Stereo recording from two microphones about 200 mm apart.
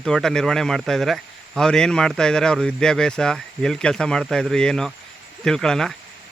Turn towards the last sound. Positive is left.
turn(degrees=5)  # may be behind; listen again after turning